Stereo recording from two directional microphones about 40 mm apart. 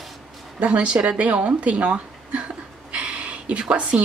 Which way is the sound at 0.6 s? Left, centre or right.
Right.